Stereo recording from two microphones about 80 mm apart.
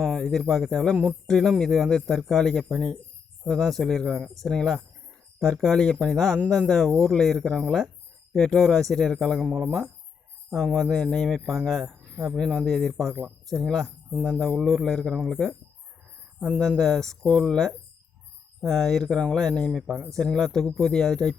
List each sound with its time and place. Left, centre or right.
0.0 s speech: centre
9.4 s speech: centre
10.8 s speech: centre
12.1 s speech: right
12.4 s speech: centre
16.6 s speech: centre